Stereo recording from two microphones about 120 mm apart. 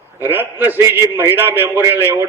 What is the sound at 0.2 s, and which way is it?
A man's voice, 15° right (ahead or behind).